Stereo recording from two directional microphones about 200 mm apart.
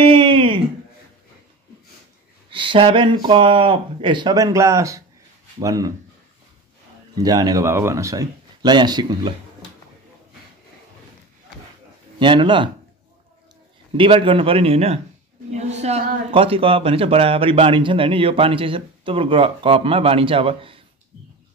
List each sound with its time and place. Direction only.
0.0 s a sound: 25° right (ahead or behind)
2.5 s speech: 25° right (ahead or behind)
7.2 s speech: 20° right (ahead or behind)
12.2 s speech: 25° right (ahead or behind)
13.9 s speech: 25° right (ahead or behind)